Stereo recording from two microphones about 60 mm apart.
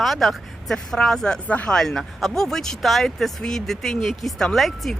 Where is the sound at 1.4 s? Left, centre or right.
Left.